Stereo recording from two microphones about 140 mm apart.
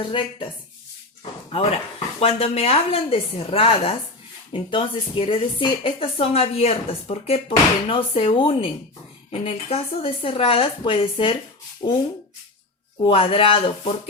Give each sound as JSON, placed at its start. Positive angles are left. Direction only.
{"t": 0.0, "sound": "speech", "side_deg": 35}
{"t": 2.2, "sound": "a woman's voice", "side_deg": 45}
{"t": 13.0, "sound": "speech", "side_deg": 40}